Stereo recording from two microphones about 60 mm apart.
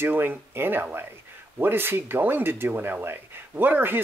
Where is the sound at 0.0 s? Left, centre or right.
Right.